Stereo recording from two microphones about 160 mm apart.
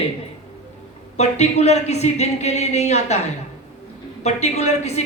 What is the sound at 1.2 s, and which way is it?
Speech, 45° left (ahead or behind).